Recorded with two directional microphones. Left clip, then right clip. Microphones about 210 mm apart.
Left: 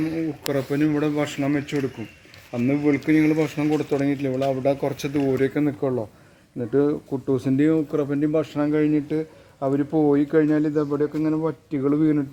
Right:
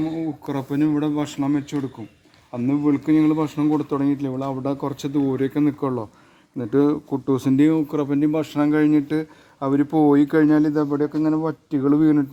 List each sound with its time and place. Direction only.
0.0 s speech: 50° right (ahead or behind)